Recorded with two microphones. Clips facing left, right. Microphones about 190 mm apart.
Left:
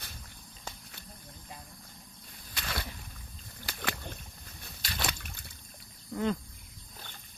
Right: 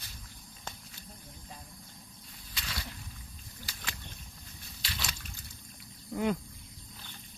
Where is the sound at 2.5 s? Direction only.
55° left (ahead or behind).